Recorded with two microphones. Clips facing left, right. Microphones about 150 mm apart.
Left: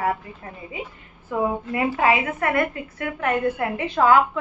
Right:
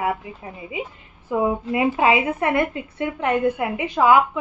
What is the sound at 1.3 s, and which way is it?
A woman's voice, 15° right (ahead or behind).